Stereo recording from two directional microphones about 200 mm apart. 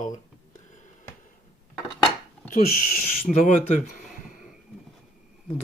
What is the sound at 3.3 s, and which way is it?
Speech, centre (ahead or behind).